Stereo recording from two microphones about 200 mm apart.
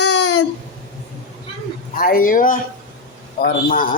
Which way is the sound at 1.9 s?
45° left (ahead or behind).